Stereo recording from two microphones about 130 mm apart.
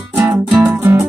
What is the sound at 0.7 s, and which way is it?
Music, 20° right (ahead or behind).